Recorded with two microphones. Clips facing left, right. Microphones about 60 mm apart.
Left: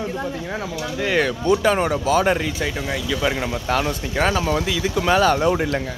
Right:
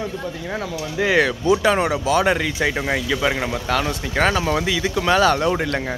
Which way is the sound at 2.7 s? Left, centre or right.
Right.